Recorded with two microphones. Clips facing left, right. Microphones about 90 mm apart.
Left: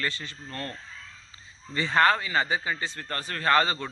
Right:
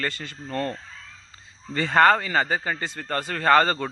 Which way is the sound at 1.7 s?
55° right (ahead or behind).